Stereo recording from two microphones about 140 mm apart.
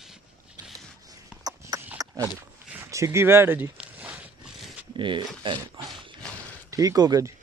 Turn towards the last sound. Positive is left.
turn(degrees=-25)  # may be behind; listen again after turning